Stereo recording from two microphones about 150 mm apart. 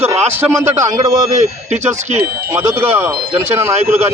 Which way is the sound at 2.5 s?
15° right (ahead or behind).